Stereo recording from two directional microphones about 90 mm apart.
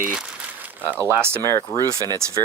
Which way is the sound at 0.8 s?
25° right (ahead or behind).